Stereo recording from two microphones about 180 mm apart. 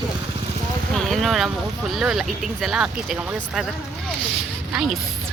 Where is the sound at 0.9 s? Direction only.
Centre (ahead or behind).